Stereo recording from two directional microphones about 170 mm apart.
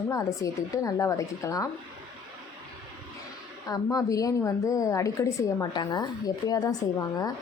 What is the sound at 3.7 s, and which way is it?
A woman's voice, 20° left (ahead or behind).